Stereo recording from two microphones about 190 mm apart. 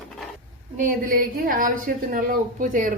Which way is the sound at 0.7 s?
45° right (ahead or behind).